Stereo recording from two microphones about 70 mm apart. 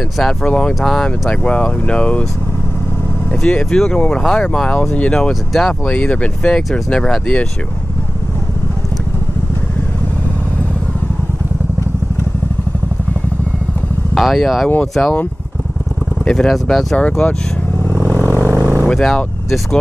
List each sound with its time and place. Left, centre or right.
0.2 s speech: centre
3.3 s speech: centre
5.3 s speech: centre
5.9 s speech: centre
14.1 s speech: centre
15.0 s speech: left
16.3 s speech: centre
18.0 s vehicle: left
18.5 s vehicle: right
18.9 s speech: centre